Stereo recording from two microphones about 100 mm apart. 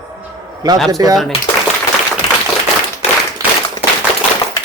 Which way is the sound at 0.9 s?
40° right (ahead or behind).